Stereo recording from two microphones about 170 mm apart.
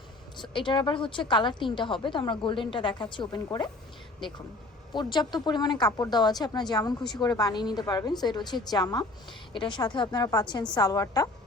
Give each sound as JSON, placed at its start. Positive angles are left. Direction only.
{"t": 0.4, "sound": "speech", "side_deg": 30}
{"t": 4.9, "sound": "speech", "side_deg": 25}